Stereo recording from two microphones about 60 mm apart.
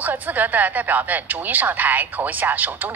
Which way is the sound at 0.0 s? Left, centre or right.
Right.